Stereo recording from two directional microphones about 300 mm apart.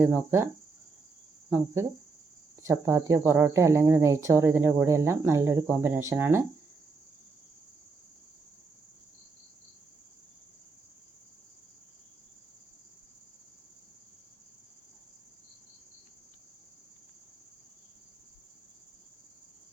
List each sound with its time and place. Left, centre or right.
0.0 s speech: centre
1.5 s speech: centre